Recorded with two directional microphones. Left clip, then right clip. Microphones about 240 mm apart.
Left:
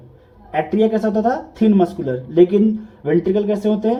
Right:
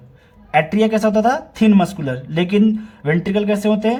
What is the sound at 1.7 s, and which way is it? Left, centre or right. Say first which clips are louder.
Speech: left 1 dB; right.